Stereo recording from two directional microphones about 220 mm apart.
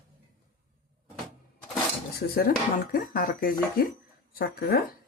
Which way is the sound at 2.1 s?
45° left (ahead or behind).